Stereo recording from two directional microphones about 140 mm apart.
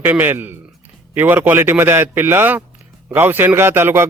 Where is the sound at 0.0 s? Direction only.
15° right (ahead or behind).